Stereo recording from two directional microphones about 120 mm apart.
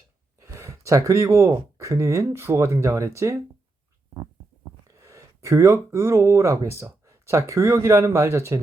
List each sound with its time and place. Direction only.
0.4 s speech: 25° right (ahead or behind)
4.9 s speech: 25° right (ahead or behind)